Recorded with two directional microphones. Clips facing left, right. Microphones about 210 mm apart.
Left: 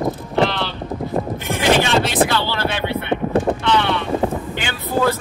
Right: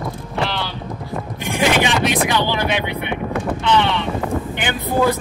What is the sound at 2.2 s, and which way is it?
Vehicle, 15° right (ahead or behind).